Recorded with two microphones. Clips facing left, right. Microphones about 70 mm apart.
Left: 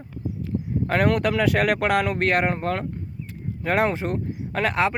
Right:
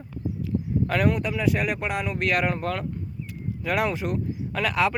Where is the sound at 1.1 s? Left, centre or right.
Left.